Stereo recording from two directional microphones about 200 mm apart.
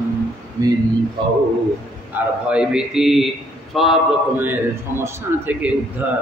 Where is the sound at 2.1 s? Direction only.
5° right (ahead or behind).